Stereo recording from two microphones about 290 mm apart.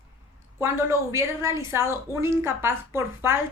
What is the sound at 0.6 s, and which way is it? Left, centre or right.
A woman's voice, centre.